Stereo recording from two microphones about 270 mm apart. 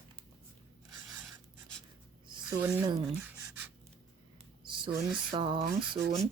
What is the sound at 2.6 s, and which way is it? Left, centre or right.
Speech, centre.